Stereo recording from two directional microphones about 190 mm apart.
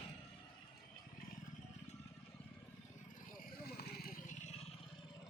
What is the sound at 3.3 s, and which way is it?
Vehicle, 55° left (ahead or behind).